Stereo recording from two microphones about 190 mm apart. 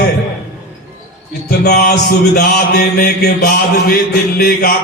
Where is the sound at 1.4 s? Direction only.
55° left (ahead or behind).